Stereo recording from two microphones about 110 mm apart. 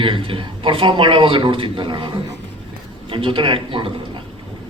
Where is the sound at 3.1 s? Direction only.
50° right (ahead or behind).